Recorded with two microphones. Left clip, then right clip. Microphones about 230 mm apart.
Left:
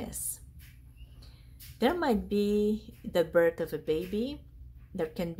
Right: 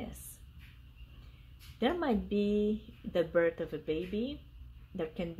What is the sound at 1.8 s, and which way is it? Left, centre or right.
Speech, centre.